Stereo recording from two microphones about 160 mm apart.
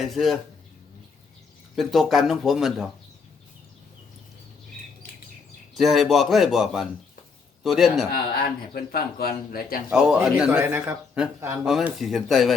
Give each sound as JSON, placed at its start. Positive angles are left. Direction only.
{"t": 0.0, "sound": "speech", "side_deg": 0}
{"t": 1.7, "sound": "speech", "side_deg": 0}
{"t": 5.7, "sound": "speech", "side_deg": 0}
{"t": 8.1, "sound": "a man's voice", "side_deg": 70}
{"t": 9.9, "sound": "a man's voice", "side_deg": -5}
{"t": 11.6, "sound": "speech", "side_deg": -5}